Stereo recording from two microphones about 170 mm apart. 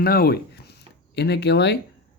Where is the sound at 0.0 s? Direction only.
60° left (ahead or behind).